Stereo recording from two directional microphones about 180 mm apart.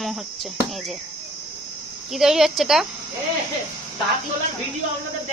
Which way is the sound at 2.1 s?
Centre (ahead or behind).